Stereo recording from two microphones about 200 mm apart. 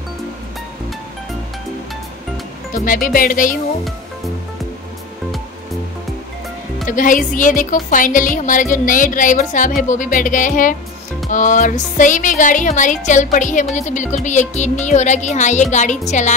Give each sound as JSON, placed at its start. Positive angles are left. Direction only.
{"t": 2.7, "sound": "speech", "side_deg": 40}
{"t": 6.9, "sound": "speech", "side_deg": 40}